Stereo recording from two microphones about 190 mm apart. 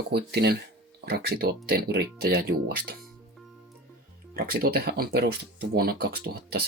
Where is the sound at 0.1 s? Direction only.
60° right (ahead or behind).